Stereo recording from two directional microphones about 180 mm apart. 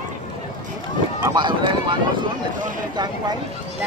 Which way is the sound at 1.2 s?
25° right (ahead or behind).